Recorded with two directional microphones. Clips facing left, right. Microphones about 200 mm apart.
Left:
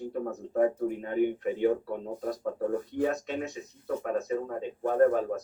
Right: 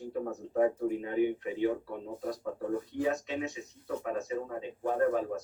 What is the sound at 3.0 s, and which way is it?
A man's voice, 55° left (ahead or behind).